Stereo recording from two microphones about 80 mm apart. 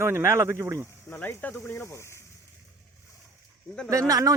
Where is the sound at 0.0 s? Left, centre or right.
Right.